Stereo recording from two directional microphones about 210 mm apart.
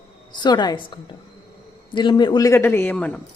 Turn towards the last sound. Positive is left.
turn(degrees=5)  # may be behind; listen again after turning